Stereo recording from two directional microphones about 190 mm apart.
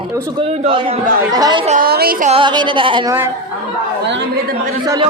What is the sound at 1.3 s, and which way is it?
Music, 20° right (ahead or behind).